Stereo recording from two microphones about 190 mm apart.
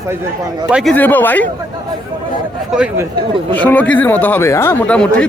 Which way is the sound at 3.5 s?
10° left (ahead or behind).